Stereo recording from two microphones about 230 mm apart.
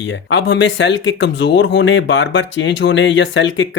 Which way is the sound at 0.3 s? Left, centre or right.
Left.